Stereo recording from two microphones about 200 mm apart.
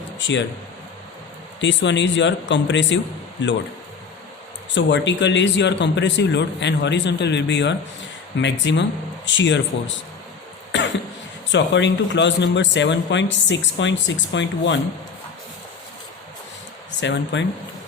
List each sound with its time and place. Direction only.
0.2 s speech: 65° left (ahead or behind)
1.6 s a man's voice: 65° left (ahead or behind)
4.7 s a man's voice: 65° left (ahead or behind)
10.7 s cough: 65° left (ahead or behind)
11.5 s a man's voice: 60° left (ahead or behind)
17.0 s a man's voice: 65° left (ahead or behind)